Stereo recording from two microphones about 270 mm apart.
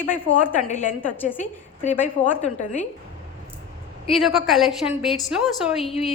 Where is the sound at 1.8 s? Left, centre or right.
Left.